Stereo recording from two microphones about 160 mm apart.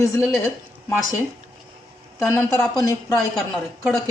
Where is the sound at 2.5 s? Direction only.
20° left (ahead or behind).